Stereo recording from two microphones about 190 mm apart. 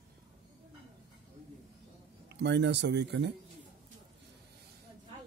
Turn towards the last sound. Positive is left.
turn(degrees=-65)  # may be behind; listen again after turning